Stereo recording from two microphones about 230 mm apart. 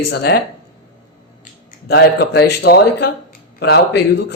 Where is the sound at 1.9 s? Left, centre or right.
Left.